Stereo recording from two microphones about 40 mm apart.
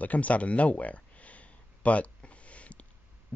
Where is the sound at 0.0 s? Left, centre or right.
Left.